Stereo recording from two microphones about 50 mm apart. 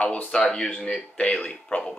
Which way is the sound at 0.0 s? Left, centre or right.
Left.